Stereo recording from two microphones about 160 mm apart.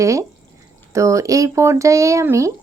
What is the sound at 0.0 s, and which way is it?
Speech, 20° right (ahead or behind).